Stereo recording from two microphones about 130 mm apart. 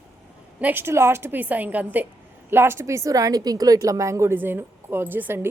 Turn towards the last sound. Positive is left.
turn(degrees=-15)  # may be behind; listen again after turning